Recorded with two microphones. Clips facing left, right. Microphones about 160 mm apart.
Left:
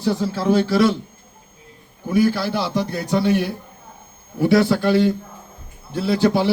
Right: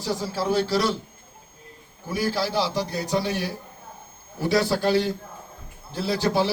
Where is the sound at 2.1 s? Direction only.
55° left (ahead or behind).